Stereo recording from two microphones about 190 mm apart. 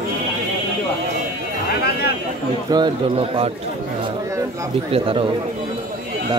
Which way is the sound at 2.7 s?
25° right (ahead or behind).